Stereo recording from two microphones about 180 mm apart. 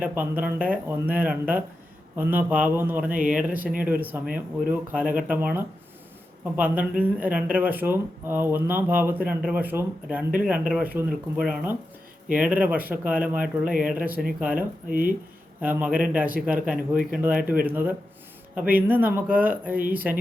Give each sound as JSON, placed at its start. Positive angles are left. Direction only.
{"t": 0.0, "sound": "speech", "side_deg": -10}
{"t": 14.8, "sound": "speech", "side_deg": -50}
{"t": 15.6, "sound": "speech", "side_deg": -10}